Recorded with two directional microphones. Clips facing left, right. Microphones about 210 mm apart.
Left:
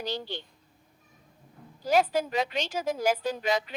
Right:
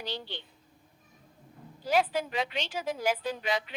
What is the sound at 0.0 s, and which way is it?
Speech, 45° left (ahead or behind).